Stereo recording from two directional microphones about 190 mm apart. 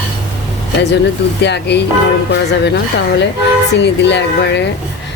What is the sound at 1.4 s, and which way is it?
A woman's voice, 60° left (ahead or behind).